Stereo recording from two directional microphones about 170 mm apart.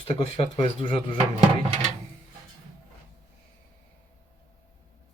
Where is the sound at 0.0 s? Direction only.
35° left (ahead or behind).